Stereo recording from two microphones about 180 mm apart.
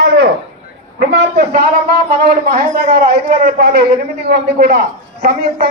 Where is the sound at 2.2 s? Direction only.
55° right (ahead or behind).